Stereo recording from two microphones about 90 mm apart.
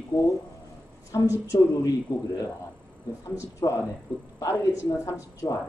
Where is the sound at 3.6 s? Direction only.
55° left (ahead or behind).